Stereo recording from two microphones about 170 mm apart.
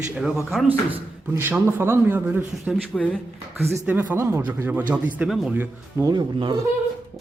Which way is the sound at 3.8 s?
10° right (ahead or behind).